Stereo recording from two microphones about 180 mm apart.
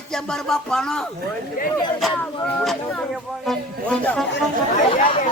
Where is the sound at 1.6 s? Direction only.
50° left (ahead or behind).